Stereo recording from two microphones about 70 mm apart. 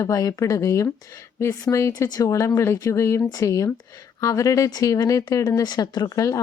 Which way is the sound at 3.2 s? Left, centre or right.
Left.